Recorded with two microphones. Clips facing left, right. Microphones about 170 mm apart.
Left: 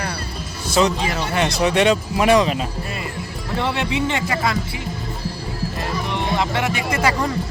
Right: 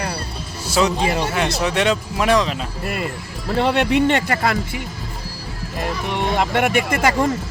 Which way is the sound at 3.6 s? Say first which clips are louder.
Right 6 dB; 55° right (ahead or behind).